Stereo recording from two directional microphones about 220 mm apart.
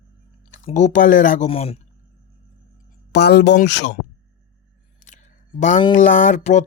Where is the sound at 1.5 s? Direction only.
25° left (ahead or behind).